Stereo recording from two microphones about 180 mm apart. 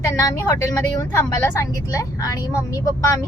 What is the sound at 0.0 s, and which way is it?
A woman's voice, 20° left (ahead or behind).